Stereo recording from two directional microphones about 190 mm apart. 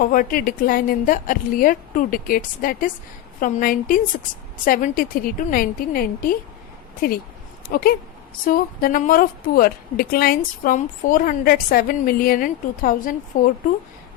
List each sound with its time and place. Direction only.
0.0 s a woman's voice: 45° left (ahead or behind)